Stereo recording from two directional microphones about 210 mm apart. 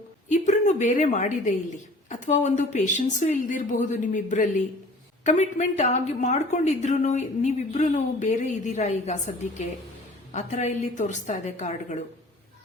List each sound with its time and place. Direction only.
0.3 s a woman's voice: 35° left (ahead or behind)